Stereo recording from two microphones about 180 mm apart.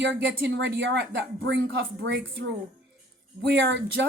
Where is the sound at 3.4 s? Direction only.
65° right (ahead or behind).